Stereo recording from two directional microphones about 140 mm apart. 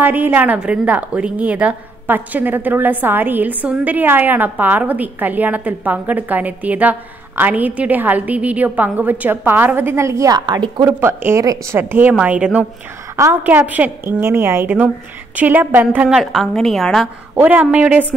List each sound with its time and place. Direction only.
0.0 s a woman's voice: 15° right (ahead or behind); by 10.9 s 30° right (ahead or behind)
10.9 s a woman's voice: 15° right (ahead or behind)
16.2 s a woman's voice: centre (ahead or behind)
17.4 s a woman's voice: 10° right (ahead or behind)